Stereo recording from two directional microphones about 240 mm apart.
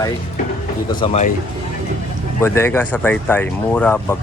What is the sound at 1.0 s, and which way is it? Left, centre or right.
Speech, left.